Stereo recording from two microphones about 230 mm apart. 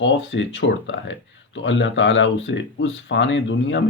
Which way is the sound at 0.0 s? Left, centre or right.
Left.